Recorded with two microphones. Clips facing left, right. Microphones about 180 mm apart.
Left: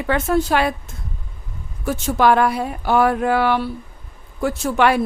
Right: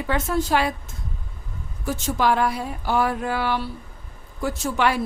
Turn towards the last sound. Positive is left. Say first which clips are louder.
# left 5 dB
turn(degrees=60)  # may be behind; listen again after turning